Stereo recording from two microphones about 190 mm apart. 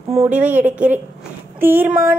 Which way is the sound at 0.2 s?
10° right (ahead or behind).